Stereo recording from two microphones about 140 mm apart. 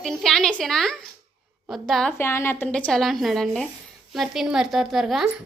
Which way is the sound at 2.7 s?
5° left (ahead or behind).